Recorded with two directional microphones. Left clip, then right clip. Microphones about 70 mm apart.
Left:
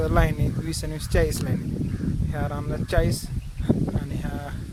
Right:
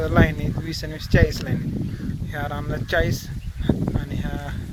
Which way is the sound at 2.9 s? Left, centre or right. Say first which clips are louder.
Right 3 dB; left.